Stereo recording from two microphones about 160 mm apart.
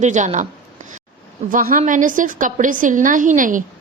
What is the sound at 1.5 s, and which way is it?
A woman's voice, 60° right (ahead or behind).